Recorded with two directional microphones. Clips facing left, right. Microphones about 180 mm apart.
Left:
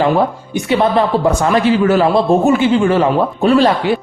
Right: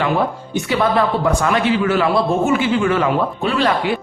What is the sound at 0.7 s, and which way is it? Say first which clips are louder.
Speech: left 4 dB; 25° left (ahead or behind).